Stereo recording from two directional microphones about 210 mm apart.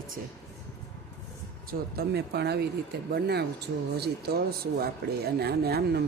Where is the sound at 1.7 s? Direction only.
50° right (ahead or behind).